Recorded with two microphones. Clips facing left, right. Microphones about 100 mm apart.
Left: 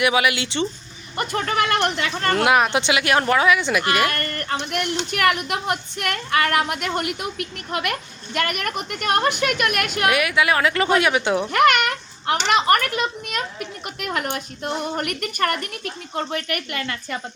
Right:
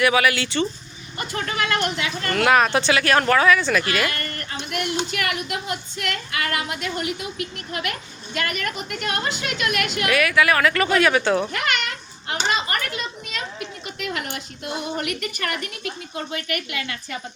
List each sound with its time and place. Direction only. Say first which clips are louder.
0.0 s speech: right 1 dB; 20° left (ahead or behind)
1.1 s speech: left 5 dB; 55° left (ahead or behind)
2.3 s speech: right 1 dB; 20° left (ahead or behind)
4.0 s a sound: left 4 dB; 50° left (ahead or behind)
5.1 s a woman's voice: left 6 dB; 50° left (ahead or behind)
10.1 s speech: right 1 dB; 20° left (ahead or behind)
11.5 s a sound: left 9 dB; 60° left (ahead or behind)
13.8 s a woman's voice: left 4 dB; 50° left (ahead or behind)